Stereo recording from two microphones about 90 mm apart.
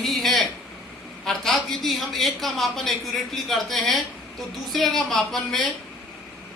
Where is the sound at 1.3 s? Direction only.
5° left (ahead or behind).